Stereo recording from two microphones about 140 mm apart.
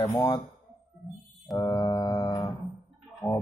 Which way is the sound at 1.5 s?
30° left (ahead or behind).